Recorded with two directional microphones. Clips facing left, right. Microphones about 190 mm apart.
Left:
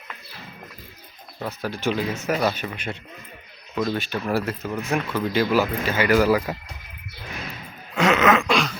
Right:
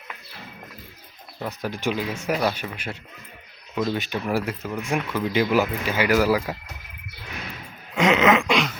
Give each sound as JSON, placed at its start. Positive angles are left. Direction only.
{"t": 1.6, "sound": "speech", "side_deg": -15}
{"t": 2.3, "sound": "speech", "side_deg": 0}
{"t": 7.9, "sound": "groan", "side_deg": -20}